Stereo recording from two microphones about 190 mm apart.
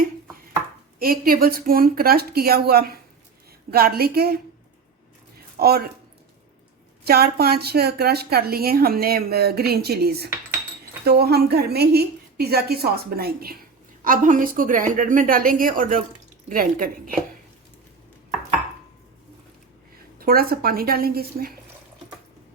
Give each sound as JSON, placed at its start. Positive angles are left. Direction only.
{"t": 0.9, "sound": "a woman's voice", "side_deg": -50}
{"t": 5.5, "sound": "a woman's voice", "side_deg": -55}
{"t": 7.0, "sound": "a woman's voice", "side_deg": -55}
{"t": 20.1, "sound": "a woman's voice", "side_deg": -50}